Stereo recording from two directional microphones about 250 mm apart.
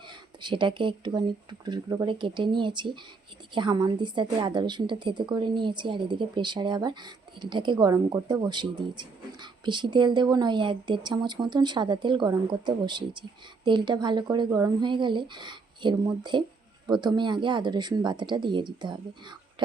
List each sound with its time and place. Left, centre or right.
0.1 s speech: centre